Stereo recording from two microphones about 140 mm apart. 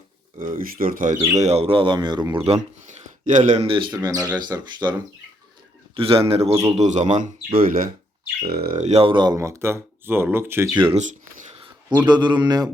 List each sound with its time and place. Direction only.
0.3 s speech: 75° right (ahead or behind)
1.4 s speech: 50° right (ahead or behind); by 2.4 s 30° right (ahead or behind)
2.4 s speech: 55° right (ahead or behind)
3.7 s speech: 35° right (ahead or behind)
6.0 s speech: 45° right (ahead or behind); by 8.7 s 90° right
8.8 s speech: 45° right (ahead or behind); by 10.7 s 15° right (ahead or behind)
10.9 s a sound: 55° right (ahead or behind)
12.0 s speech: 30° right (ahead or behind)